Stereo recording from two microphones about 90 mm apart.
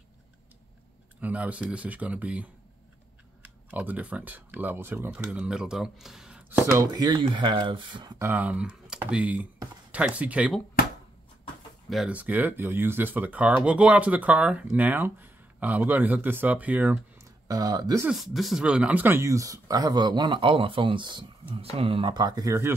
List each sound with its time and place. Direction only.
1.2 s speech: 15° right (ahead or behind)
5.2 s speech: 10° right (ahead or behind)
6.6 s speech: 35° right (ahead or behind)
6.9 s speech: 55° right (ahead or behind)
8.2 s speech: 20° right (ahead or behind)
12.1 s speech: 20° right (ahead or behind)
17.2 s speech: 40° right (ahead or behind)
18.1 s speech: centre (ahead or behind)
18.6 s speech: 15° right (ahead or behind)
19.2 s speech: 40° right (ahead or behind)